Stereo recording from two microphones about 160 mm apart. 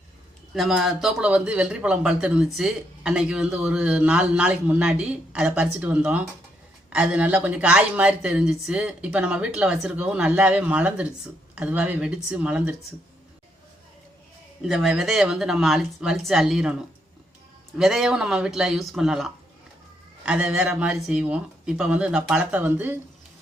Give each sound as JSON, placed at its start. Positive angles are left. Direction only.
{"t": 0.5, "sound": "speech", "side_deg": 0}
{"t": 14.6, "sound": "speech", "side_deg": -5}
{"t": 17.7, "sound": "speech", "side_deg": 0}